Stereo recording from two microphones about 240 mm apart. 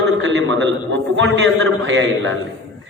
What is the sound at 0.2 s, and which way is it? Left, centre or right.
A man's voice, right.